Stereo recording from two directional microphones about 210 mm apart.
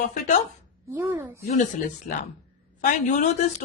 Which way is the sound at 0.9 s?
10° right (ahead or behind).